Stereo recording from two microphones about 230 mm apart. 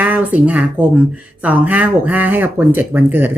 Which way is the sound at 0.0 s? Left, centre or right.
Centre.